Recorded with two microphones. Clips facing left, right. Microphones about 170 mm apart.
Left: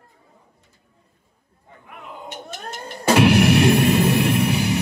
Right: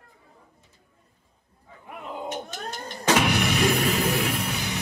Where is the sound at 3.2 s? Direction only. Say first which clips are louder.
Left 12 dB; 65° left (ahead or behind).